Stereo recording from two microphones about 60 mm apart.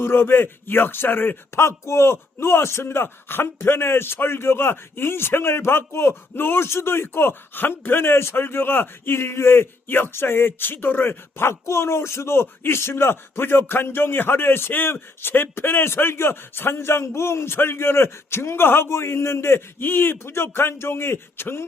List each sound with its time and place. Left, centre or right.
0.0 s a man's voice: left